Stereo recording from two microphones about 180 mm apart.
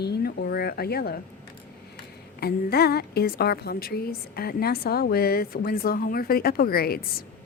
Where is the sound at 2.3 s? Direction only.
60° left (ahead or behind).